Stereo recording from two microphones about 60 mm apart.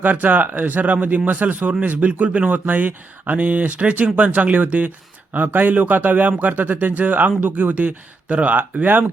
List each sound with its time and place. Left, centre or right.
0.0 s speech: right